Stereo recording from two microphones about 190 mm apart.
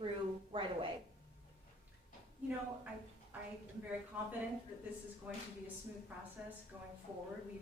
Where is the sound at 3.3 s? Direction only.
10° right (ahead or behind).